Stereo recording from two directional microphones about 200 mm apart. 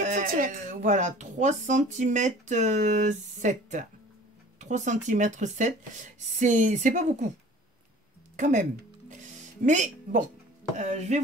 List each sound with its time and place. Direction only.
0.0 s speech: 40° right (ahead or behind)
8.4 s speech: 40° right (ahead or behind)
9.1 s music: 40° right (ahead or behind)
10.8 s speech: 35° right (ahead or behind)